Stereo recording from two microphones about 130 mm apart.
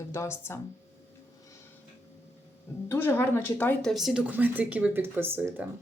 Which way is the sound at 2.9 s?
15° left (ahead or behind).